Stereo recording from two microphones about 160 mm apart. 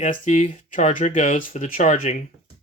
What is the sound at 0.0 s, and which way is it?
Speech, 50° left (ahead or behind).